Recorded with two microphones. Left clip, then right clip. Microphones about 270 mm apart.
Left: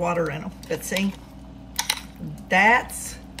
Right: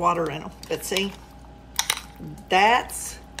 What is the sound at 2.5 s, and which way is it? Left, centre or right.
Speech, centre.